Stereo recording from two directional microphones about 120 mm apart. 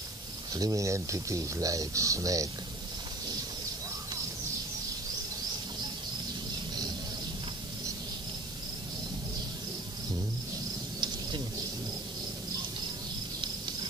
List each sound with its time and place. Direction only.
0.5 s speech: 30° right (ahead or behind)